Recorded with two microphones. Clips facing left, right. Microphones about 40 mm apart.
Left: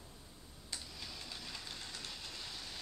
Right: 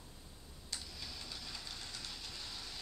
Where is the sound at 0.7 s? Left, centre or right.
Centre.